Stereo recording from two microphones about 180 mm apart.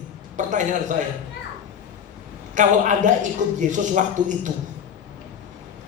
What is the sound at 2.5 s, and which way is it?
A man's voice, 45° right (ahead or behind).